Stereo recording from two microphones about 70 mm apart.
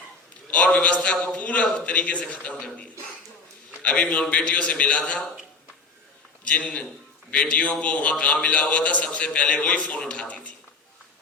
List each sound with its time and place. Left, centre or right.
0.5 s a man's voice: centre
6.4 s a man's voice: centre